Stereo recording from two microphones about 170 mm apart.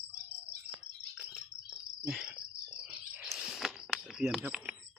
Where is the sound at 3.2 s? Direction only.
5° right (ahead or behind).